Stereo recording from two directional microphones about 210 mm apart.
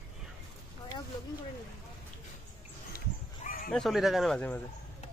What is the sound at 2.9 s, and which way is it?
Dog, 40° left (ahead or behind).